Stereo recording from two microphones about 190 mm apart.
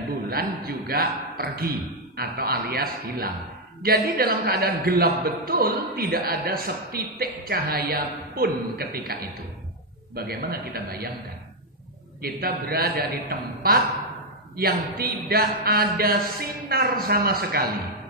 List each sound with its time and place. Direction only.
0.3 s speech: 50° right (ahead or behind)
10.1 s a man's voice: 55° right (ahead or behind)
12.2 s speech: 55° right (ahead or behind)